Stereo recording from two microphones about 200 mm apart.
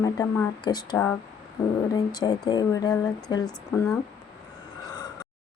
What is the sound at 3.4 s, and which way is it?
Speech, 5° left (ahead or behind).